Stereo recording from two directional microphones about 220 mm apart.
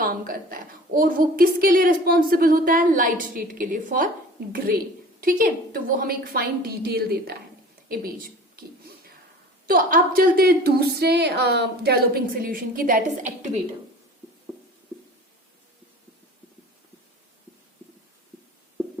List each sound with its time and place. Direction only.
0.0 s a woman's voice: 40° right (ahead or behind)
9.6 s a woman's voice: 40° right (ahead or behind)